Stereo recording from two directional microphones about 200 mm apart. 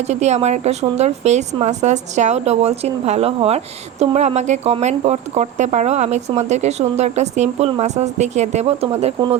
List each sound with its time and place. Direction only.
0.1 s speech: 35° right (ahead or behind)